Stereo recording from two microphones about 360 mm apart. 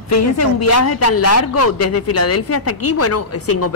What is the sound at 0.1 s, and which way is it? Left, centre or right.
A man's voice, left.